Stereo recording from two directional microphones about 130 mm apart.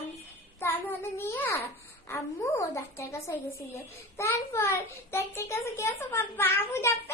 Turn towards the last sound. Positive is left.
turn(degrees=20)  # may be behind; listen again after turning